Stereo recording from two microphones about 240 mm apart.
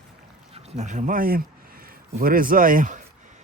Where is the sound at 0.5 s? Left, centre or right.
Right.